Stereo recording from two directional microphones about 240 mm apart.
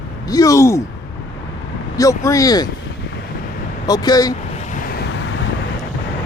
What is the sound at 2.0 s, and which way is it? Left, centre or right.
Speech, centre.